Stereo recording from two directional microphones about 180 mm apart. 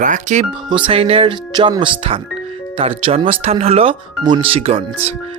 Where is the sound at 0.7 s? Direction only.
30° right (ahead or behind).